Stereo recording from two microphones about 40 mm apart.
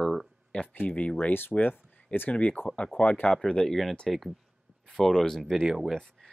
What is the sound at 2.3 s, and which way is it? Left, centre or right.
Speech, left.